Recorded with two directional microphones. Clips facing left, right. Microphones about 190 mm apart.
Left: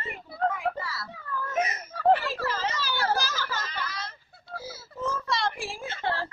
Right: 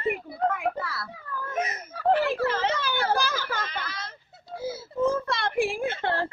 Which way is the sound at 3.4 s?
55° right (ahead or behind).